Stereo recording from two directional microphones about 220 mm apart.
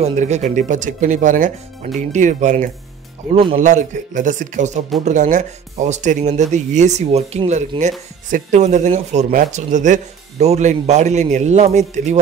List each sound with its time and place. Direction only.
0.0 s speech: 30° right (ahead or behind)